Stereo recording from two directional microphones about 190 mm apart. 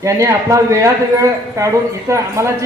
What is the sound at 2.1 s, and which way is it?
Speech, 15° right (ahead or behind).